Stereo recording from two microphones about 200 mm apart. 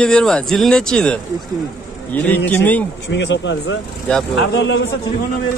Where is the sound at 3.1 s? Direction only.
65° left (ahead or behind).